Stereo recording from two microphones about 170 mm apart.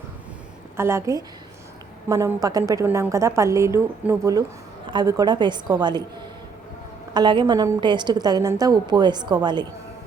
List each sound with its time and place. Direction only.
0.8 s a woman's voice: 15° right (ahead or behind)
7.1 s a woman's voice: 25° right (ahead or behind)